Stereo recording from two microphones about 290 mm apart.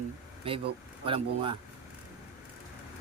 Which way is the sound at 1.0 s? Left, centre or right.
Centre.